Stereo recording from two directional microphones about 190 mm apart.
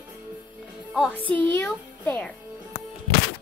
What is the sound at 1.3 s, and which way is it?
Speech, 10° left (ahead or behind).